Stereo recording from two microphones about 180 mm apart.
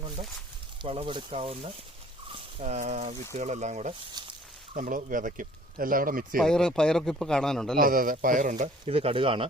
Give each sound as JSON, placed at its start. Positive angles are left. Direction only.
{"t": 0.2, "sound": "speech", "side_deg": -35}
{"t": 4.2, "sound": "a sound", "side_deg": -20}
{"t": 4.7, "sound": "speech", "side_deg": -45}
{"t": 6.3, "sound": "speech", "side_deg": 5}
{"t": 7.8, "sound": "speech", "side_deg": -50}
{"t": 8.9, "sound": "speech", "side_deg": -30}